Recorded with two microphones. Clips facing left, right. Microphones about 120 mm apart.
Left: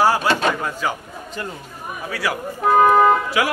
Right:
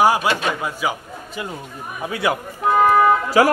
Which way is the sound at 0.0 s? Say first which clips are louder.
Right 1 dB; 15° right (ahead or behind).